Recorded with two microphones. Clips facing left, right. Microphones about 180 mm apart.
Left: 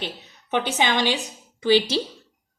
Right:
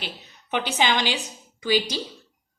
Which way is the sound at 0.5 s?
25° left (ahead or behind).